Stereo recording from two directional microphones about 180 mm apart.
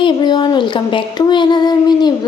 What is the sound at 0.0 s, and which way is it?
Child singing, 25° left (ahead or behind).